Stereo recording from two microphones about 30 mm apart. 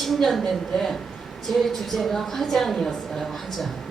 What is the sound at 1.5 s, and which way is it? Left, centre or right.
A woman's voice, centre.